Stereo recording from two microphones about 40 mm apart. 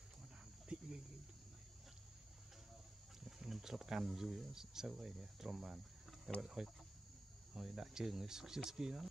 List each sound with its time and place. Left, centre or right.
0.7 s cricket: right
3.3 s speech: centre